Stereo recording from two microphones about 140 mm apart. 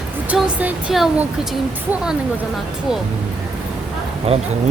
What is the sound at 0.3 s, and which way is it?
Speech, 10° right (ahead or behind).